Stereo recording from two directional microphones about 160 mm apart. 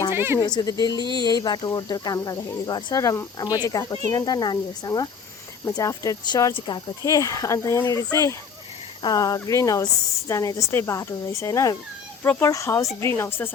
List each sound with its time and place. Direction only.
0.1 s speech: 15° right (ahead or behind)
0.3 s speech: 25° left (ahead or behind)